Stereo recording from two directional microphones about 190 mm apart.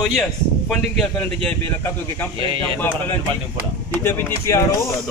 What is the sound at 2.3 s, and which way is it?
Speech, 25° right (ahead or behind).